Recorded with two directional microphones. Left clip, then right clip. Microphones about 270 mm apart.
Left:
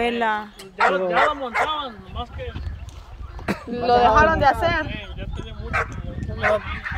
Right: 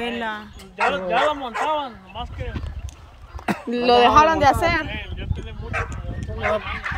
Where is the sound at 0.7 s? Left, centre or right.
Left.